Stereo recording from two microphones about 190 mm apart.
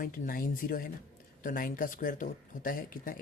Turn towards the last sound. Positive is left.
turn(degrees=50)  # may be behind; listen again after turning